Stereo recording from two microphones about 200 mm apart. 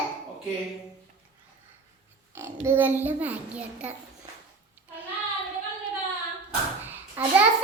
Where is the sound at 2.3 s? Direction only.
10° right (ahead or behind).